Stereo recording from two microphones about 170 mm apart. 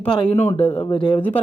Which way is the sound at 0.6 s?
35° left (ahead or behind).